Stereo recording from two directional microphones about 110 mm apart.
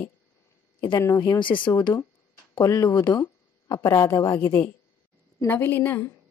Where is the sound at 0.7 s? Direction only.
45° left (ahead or behind).